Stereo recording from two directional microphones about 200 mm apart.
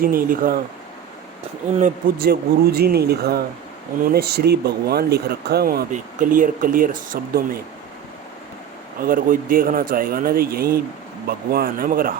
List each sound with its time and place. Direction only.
0.0 s speech: 45° right (ahead or behind)
1.8 s speech: 45° right (ahead or behind)
9.0 s speech: 45° right (ahead or behind)